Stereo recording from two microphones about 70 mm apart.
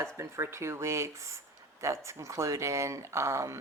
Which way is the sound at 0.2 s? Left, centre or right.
Right.